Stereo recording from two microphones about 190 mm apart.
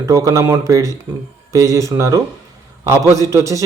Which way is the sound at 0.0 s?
15° right (ahead or behind).